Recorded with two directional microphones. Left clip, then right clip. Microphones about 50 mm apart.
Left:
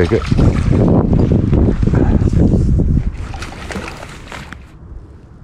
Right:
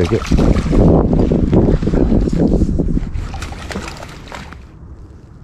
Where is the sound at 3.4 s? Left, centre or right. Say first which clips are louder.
Left 1 dB; centre.